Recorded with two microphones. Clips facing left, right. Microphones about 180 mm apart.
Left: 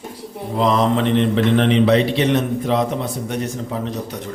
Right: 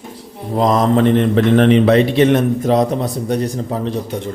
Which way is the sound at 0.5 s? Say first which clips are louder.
Right 3 dB; 40° right (ahead or behind).